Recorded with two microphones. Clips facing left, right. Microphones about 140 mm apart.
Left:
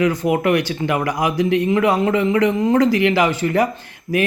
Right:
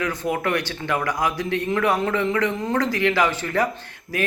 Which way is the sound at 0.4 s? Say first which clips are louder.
Left 7 dB; 15° left (ahead or behind).